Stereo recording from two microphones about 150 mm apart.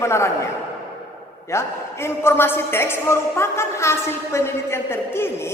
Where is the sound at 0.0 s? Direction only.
20° left (ahead or behind).